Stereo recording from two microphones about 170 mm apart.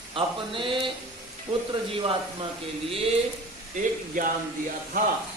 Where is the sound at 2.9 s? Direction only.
35° right (ahead or behind).